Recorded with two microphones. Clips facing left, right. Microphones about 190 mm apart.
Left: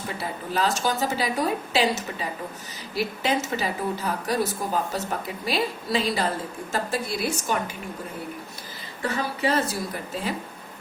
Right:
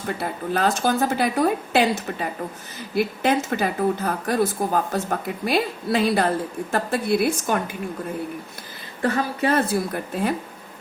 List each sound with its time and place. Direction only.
0.2 s a woman's voice: 55° right (ahead or behind)
9.0 s a woman's voice: 55° right (ahead or behind)